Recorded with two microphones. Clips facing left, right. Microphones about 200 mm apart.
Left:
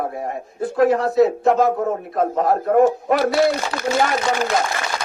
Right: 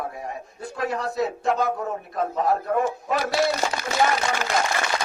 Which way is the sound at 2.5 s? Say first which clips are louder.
Left 11 dB; 55° left (ahead or behind).